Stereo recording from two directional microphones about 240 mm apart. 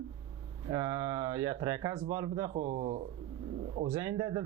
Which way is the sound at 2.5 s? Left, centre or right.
Right.